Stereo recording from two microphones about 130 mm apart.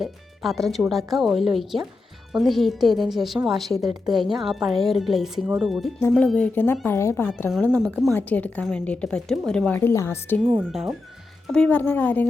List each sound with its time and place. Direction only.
0.0 s speech: centre (ahead or behind)
6.0 s a woman's voice: 15° left (ahead or behind)
7.8 s speech: centre (ahead or behind)
8.1 s a woman's voice: 15° left (ahead or behind)
10.7 s a woman's voice: 5° right (ahead or behind); by 12.3 s 15° left (ahead or behind)